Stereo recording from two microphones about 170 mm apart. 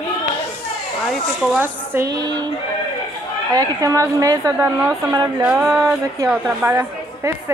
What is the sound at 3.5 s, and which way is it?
A woman's voice, 20° right (ahead or behind).